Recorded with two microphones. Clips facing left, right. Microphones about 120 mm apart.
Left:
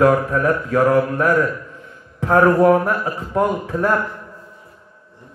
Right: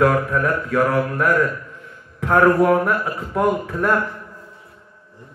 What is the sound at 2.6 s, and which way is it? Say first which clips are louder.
Mantra: left 3 dB; 30° left (ahead or behind).